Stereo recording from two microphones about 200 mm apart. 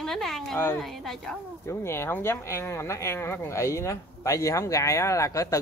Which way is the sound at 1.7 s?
10° left (ahead or behind).